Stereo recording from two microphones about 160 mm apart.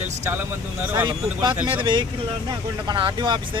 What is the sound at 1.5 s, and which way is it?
Speech, 10° right (ahead or behind).